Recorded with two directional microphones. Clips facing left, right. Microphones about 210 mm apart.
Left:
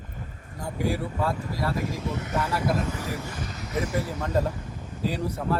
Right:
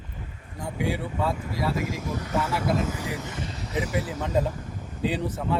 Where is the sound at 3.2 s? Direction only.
25° right (ahead or behind).